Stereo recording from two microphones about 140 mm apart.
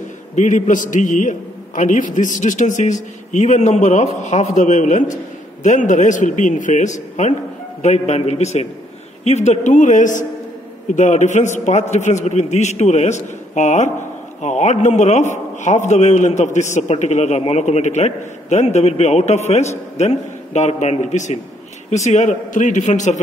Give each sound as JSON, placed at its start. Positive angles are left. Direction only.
{"t": 0.4, "sound": "a man's voice", "side_deg": 60}